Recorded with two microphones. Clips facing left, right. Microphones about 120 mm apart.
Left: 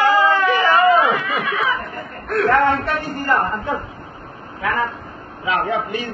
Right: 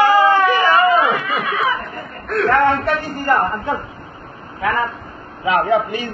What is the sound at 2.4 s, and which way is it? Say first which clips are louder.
Speech: right 1 dB; centre (ahead or behind).